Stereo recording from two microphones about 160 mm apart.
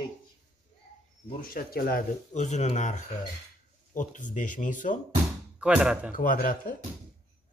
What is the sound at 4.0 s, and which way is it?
Speech, 50° left (ahead or behind).